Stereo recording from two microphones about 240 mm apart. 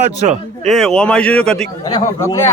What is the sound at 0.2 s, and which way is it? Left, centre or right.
Speech, right.